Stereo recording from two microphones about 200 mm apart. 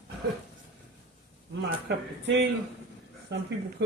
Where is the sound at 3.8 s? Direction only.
60° right (ahead or behind).